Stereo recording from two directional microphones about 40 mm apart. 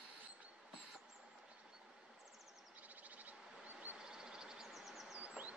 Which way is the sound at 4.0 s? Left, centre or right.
Centre.